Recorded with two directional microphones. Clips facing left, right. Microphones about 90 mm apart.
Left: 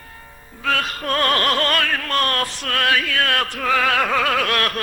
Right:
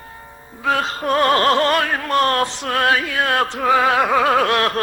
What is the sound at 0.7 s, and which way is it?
Opera, 25° right (ahead or behind).